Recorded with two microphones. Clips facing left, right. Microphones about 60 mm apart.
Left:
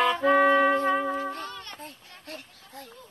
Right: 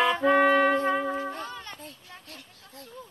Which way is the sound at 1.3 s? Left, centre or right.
Centre.